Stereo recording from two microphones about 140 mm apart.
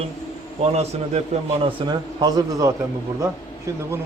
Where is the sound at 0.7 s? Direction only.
50° right (ahead or behind).